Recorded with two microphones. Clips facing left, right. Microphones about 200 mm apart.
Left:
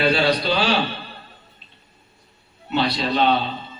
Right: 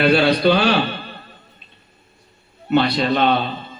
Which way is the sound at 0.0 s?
60° right (ahead or behind).